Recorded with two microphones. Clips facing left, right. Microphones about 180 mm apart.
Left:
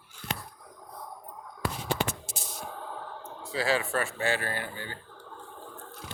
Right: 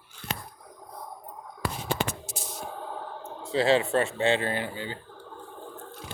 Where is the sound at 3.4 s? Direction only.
25° right (ahead or behind).